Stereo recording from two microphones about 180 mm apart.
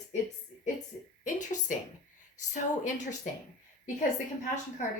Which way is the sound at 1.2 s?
45° left (ahead or behind).